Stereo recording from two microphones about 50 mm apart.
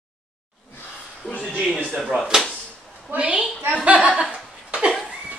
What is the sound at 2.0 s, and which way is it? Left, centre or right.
Speech, centre.